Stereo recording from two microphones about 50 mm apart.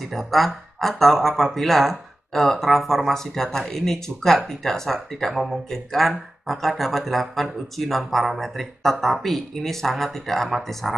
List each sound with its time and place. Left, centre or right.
0.0 s speech: centre